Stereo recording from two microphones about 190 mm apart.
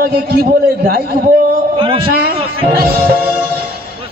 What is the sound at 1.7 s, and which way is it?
Speech, 25° right (ahead or behind).